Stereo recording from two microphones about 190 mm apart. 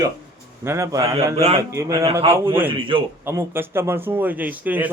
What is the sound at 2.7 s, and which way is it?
Speech, 25° right (ahead or behind).